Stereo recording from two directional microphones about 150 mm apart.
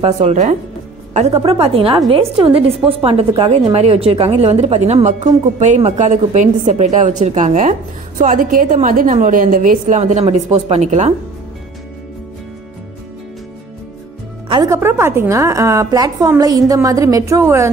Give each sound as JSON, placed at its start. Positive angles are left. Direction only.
{"t": 0.0, "sound": "a woman's voice", "side_deg": -50}
{"t": 14.5, "sound": "a woman's voice", "side_deg": -20}